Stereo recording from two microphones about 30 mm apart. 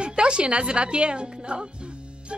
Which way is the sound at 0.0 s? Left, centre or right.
Right.